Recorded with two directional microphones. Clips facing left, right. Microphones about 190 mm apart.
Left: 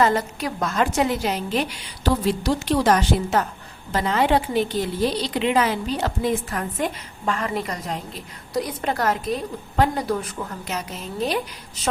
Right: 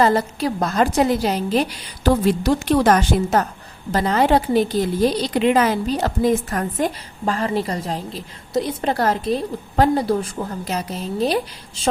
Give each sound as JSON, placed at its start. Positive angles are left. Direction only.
{"t": 0.0, "sound": "a woman's voice", "side_deg": -35}
{"t": 2.0, "sound": "a woman's voice", "side_deg": -50}